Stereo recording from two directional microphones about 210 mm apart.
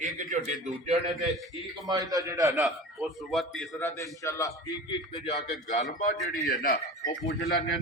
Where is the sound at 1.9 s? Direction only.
15° right (ahead or behind).